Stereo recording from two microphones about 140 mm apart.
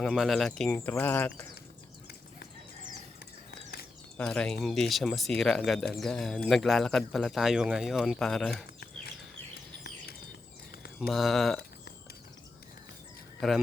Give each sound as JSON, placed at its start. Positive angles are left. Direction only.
{"t": 0.0, "sound": "speech", "side_deg": 0}
{"t": 4.2, "sound": "speech", "side_deg": 5}
{"t": 11.1, "sound": "speech", "side_deg": 0}
{"t": 13.4, "sound": "speech", "side_deg": 0}